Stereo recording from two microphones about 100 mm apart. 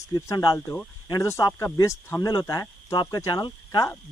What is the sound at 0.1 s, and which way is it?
Speech, 35° left (ahead or behind).